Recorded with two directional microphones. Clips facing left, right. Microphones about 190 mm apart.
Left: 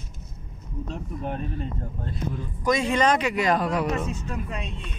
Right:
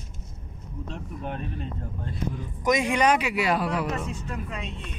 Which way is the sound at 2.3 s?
15° right (ahead or behind).